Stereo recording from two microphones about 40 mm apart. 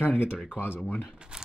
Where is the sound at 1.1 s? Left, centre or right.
Right.